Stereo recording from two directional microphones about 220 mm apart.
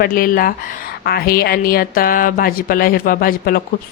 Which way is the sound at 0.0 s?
40° left (ahead or behind).